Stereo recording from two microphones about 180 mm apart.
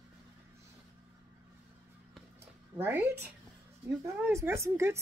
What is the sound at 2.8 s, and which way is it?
A woman's voice, 10° right (ahead or behind).